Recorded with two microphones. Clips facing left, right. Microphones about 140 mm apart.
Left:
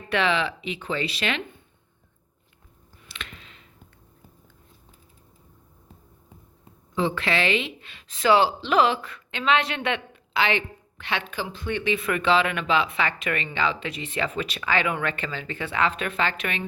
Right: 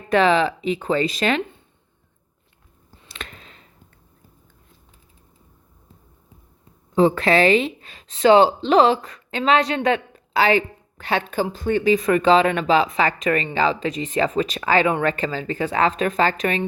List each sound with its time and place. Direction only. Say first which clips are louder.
0.1 s speech: right 7 dB; 40° right (ahead or behind)
3.1 s a sound: right 3 dB; 40° right (ahead or behind)
6.9 s speech: right 9 dB; 40° right (ahead or behind)